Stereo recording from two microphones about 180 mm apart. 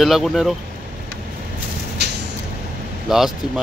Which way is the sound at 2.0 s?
70° right (ahead or behind).